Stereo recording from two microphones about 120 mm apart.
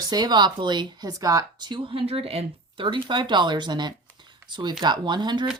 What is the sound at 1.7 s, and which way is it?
Speech, 50° right (ahead or behind).